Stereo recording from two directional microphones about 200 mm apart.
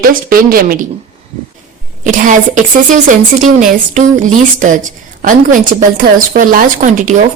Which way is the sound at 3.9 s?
40° right (ahead or behind).